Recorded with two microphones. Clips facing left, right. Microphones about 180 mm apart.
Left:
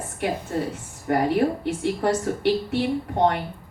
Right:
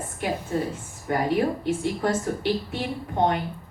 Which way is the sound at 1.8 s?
70° left (ahead or behind).